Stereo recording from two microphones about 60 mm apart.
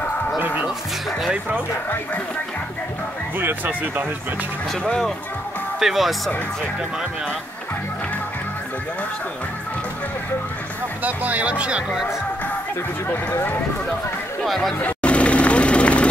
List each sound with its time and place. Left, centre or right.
3.3 s speech: right
4.8 s speech: centre
5.8 s speech: centre
11.1 s speech: right
13.1 s speech: left
14.4 s speech: centre
14.8 s vehicle: left